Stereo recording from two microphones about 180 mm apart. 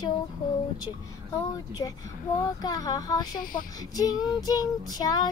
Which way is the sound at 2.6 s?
20° left (ahead or behind).